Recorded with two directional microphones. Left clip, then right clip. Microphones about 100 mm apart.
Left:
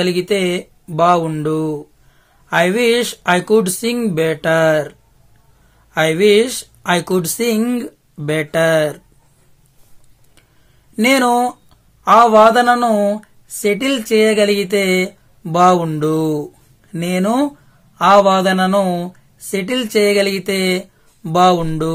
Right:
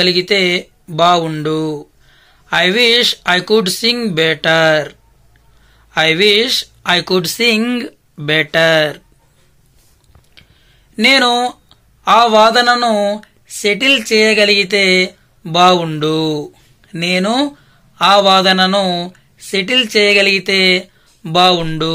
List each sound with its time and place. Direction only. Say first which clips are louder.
0.0 s speech: right 4 dB; 40° left (ahead or behind)
5.9 s speech: right 1 dB; 35° left (ahead or behind)
7.3 s speech: right 4 dB; 30° left (ahead or behind)
11.0 s speech: right 2 dB; 55° left (ahead or behind)
12.3 s speech: even; 35° left (ahead or behind)
12.5 s speech: right 1 dB; 55° left (ahead or behind)
13.6 s speech: right 5 dB; 50° left (ahead or behind)
16.9 s speech: right 3 dB; 45° left (ahead or behind)